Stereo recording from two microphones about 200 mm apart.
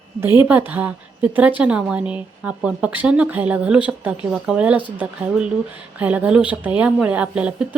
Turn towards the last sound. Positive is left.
turn(degrees=-5)  # may be behind; listen again after turning